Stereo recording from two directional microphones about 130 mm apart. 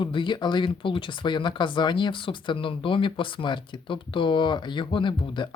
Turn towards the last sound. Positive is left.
turn(degrees=40)  # may be behind; listen again after turning